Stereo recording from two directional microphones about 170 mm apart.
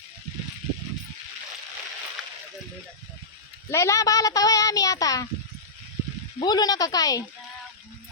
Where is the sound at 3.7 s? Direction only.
15° left (ahead or behind).